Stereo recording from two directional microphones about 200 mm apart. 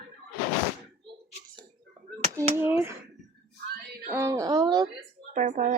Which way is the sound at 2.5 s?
10° right (ahead or behind).